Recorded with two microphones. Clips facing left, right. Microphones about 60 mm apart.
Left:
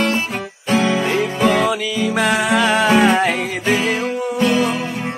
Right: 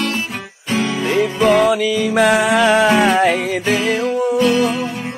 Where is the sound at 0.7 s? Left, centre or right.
Left.